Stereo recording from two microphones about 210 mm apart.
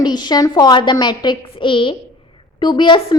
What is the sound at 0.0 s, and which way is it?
A woman's voice, 20° left (ahead or behind).